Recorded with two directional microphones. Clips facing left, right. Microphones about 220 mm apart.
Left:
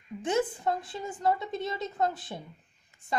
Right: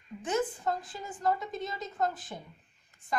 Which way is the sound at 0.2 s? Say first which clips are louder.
Left 3 dB; 30° left (ahead or behind).